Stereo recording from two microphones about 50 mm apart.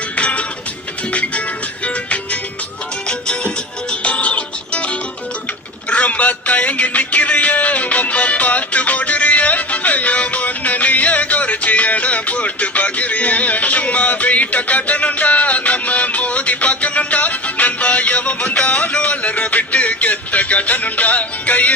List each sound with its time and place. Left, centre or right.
0.2 s music: left